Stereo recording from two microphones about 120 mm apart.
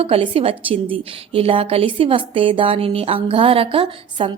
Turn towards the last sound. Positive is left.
turn(degrees=-45)  # may be behind; listen again after turning